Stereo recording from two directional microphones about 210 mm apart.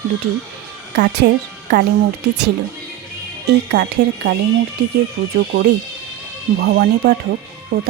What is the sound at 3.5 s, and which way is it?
Speech, 50° right (ahead or behind).